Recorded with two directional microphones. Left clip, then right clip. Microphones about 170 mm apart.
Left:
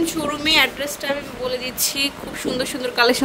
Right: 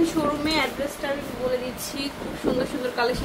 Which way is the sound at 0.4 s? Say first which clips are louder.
Left 8 dB; 60° left (ahead or behind).